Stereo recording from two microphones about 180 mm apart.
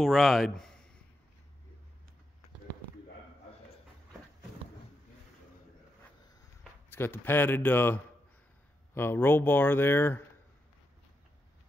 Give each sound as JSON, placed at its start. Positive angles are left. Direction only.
{"t": 0.0, "sound": "speech", "side_deg": 0}
{"t": 6.9, "sound": "speech", "side_deg": 10}